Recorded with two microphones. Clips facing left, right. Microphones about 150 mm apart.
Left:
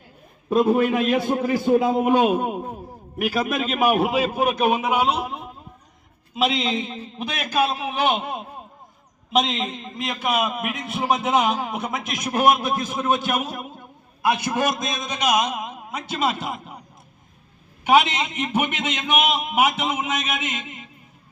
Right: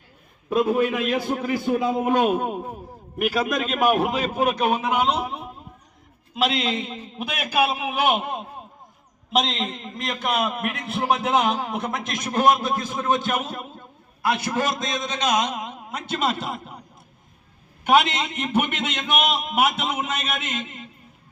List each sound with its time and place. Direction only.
0.9 s a man's voice: 40° left (ahead or behind)
1.1 s a man's voice: 20° left (ahead or behind)
2.0 s a man's voice: 10° left (ahead or behind)
17.8 s a man's voice: 5° left (ahead or behind)